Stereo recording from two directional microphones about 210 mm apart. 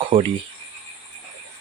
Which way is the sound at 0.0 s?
25° right (ahead or behind).